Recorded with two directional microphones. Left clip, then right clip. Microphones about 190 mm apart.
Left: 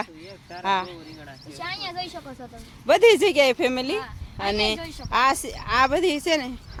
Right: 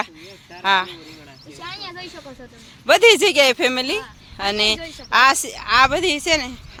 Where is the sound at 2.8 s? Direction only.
5° left (ahead or behind).